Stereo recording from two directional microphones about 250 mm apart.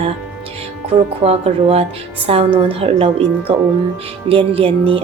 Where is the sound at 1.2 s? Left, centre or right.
Right.